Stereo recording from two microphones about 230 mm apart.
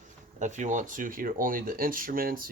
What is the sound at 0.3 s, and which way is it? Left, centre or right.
Speech, right.